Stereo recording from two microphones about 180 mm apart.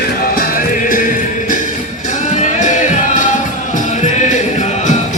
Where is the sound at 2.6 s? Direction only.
45° left (ahead or behind).